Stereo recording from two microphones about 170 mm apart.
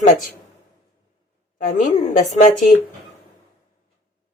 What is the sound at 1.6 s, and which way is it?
Speech, 45° left (ahead or behind).